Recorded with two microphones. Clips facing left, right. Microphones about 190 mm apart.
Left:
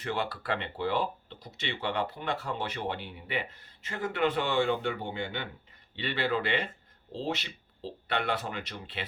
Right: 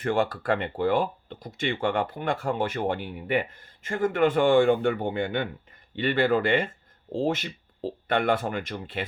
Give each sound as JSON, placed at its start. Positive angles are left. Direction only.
{"t": 0.0, "sound": "speech", "side_deg": -45}